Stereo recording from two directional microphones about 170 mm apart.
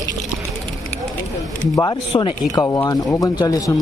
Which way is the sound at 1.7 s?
20° left (ahead or behind).